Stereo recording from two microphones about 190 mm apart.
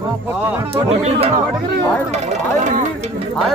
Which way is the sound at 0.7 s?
30° right (ahead or behind).